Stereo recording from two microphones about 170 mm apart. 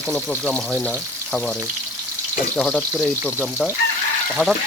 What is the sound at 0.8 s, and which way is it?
Frying, 10° left (ahead or behind).